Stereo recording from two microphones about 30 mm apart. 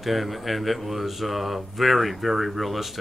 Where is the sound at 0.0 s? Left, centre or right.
Centre.